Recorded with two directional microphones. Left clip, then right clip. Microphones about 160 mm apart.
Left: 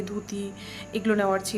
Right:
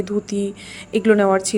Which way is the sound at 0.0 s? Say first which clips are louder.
Right 11 dB; 40° right (ahead or behind).